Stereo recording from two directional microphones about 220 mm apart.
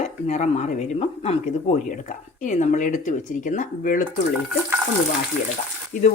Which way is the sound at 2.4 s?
35° left (ahead or behind).